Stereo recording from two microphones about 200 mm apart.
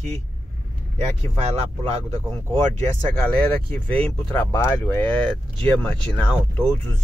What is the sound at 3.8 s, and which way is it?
Speech, 10° left (ahead or behind).